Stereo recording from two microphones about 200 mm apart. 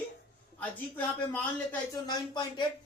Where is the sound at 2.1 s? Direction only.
20° left (ahead or behind).